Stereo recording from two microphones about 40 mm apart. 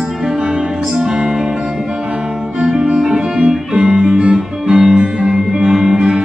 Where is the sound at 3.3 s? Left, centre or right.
Right.